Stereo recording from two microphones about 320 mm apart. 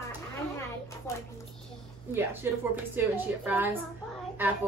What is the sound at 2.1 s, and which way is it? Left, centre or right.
A child's voice, centre.